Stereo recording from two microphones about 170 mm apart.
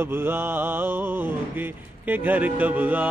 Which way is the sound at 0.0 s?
15° right (ahead or behind).